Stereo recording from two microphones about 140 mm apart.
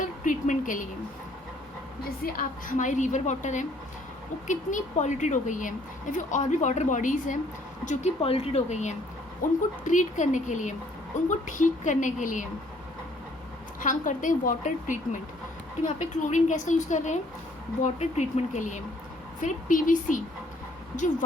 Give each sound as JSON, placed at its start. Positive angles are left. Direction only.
{"t": 0.0, "sound": "a woman's voice", "side_deg": 65}
{"t": 2.0, "sound": "a woman's voice", "side_deg": 90}
{"t": 7.9, "sound": "speech", "side_deg": 50}
{"t": 9.4, "sound": "a woman's voice", "side_deg": 70}
{"t": 13.8, "sound": "a woman's voice", "side_deg": 70}